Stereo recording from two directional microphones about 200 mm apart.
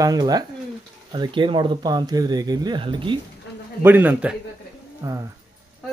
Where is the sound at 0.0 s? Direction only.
20° right (ahead or behind).